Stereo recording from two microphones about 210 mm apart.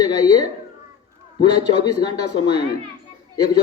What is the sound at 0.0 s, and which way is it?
Speech, 20° left (ahead or behind).